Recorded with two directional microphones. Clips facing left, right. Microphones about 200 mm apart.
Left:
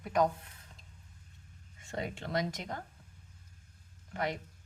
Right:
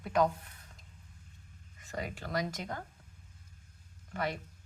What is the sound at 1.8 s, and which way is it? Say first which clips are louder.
Speech: left 1 dB; 25° left (ahead or behind).